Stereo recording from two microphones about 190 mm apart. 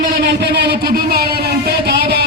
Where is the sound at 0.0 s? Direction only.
60° right (ahead or behind).